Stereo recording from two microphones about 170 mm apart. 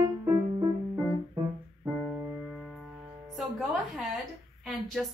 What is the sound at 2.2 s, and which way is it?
Music, 5° right (ahead or behind).